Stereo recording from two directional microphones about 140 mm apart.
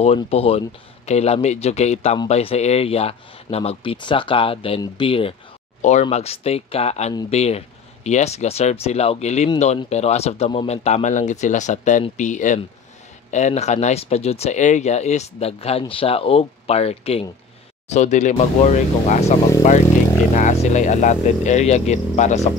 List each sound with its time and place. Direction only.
0.0 s speech: 50° left (ahead or behind)
5.8 s speech: 55° left (ahead or behind)
17.8 s speech: 55° left (ahead or behind)
20.3 s speech: 60° left (ahead or behind)